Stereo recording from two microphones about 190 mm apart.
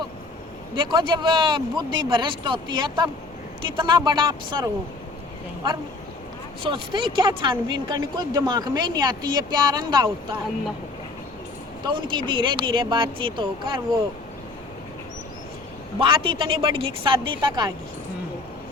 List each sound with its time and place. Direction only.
0.8 s speech: 25° right (ahead or behind)
6.6 s speech: 25° right (ahead or behind)
11.8 s speech: 25° right (ahead or behind)
16.0 s speech: 25° right (ahead or behind)